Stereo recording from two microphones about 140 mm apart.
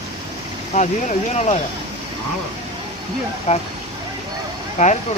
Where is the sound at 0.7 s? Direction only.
55° left (ahead or behind).